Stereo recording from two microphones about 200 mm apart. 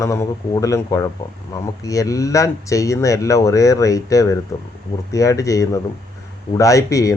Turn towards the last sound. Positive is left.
turn(degrees=15)  # may be behind; listen again after turning